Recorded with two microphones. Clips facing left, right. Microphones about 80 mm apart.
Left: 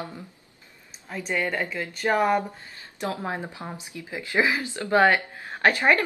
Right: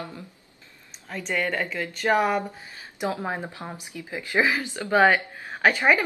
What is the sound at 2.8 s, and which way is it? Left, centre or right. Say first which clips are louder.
Speech: right 2 dB; centre.